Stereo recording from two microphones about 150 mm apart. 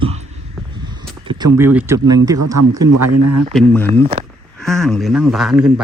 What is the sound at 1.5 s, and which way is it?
Speech, 15° right (ahead or behind).